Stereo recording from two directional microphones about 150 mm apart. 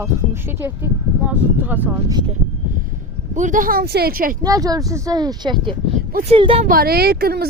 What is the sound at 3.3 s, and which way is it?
Speech, 55° right (ahead or behind).